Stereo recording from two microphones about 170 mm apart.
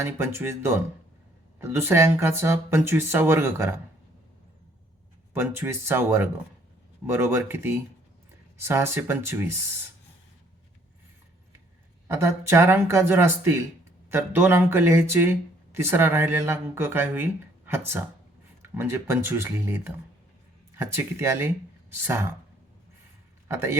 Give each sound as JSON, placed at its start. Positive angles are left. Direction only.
{"t": 0.0, "sound": "speech", "side_deg": -15}
{"t": 5.3, "sound": "speech", "side_deg": -15}
{"t": 12.0, "sound": "speech", "side_deg": -15}
{"t": 18.6, "sound": "speech", "side_deg": -15}
{"t": 23.5, "sound": "a man's voice", "side_deg": -15}